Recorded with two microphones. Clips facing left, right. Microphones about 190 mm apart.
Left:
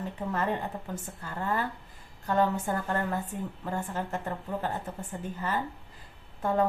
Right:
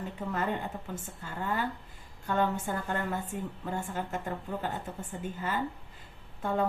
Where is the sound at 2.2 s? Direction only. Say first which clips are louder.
Left 3 dB; 40° left (ahead or behind).